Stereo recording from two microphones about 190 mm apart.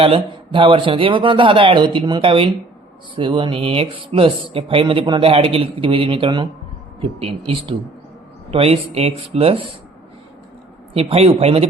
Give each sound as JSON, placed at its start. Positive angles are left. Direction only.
{"t": 0.0, "sound": "speech", "side_deg": -30}
{"t": 10.9, "sound": "speech", "side_deg": -30}